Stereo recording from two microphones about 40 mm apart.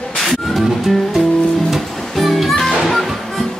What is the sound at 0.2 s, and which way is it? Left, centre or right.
Music, centre.